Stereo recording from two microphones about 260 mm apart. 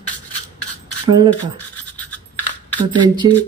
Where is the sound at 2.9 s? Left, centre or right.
Centre.